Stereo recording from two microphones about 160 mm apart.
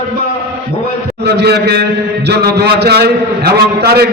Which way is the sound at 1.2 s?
90° right.